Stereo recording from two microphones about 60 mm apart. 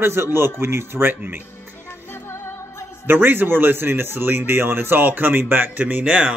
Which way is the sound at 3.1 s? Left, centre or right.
Right.